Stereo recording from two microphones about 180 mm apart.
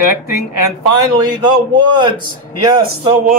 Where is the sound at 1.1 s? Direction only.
20° right (ahead or behind).